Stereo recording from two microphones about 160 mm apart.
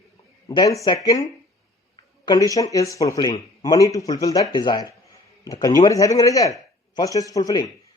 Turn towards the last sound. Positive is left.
turn(degrees=25)  # may be behind; listen again after turning